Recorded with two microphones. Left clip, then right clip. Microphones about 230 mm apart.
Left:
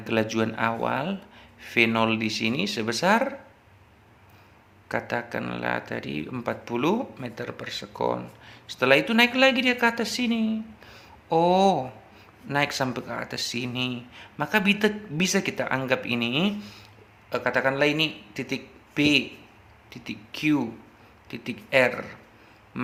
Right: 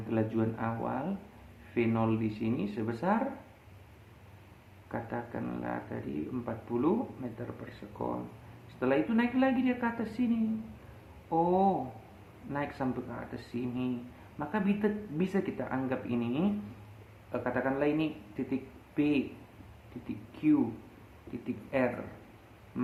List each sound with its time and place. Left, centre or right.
0.1 s speech: left
4.9 s speech: left
8.8 s a man's voice: left